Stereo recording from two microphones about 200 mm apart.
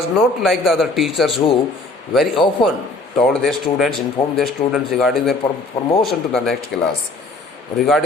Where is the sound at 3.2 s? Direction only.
Centre (ahead or behind).